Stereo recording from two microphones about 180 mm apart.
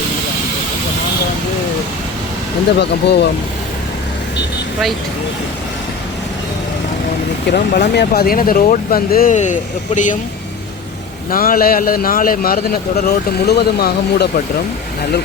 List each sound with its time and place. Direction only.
2.7 s speech: 70° left (ahead or behind)
7.4 s a man's voice: 60° left (ahead or behind); by 10.2 s 45° left (ahead or behind)
11.3 s a man's voice: 55° left (ahead or behind)